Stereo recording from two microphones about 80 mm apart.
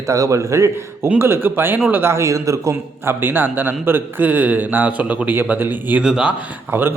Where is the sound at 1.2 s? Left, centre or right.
Right.